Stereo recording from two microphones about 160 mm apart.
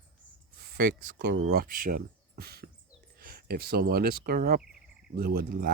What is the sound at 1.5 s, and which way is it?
Speech, 65° right (ahead or behind).